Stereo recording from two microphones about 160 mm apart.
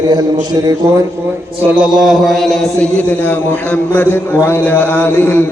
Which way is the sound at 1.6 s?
5° right (ahead or behind).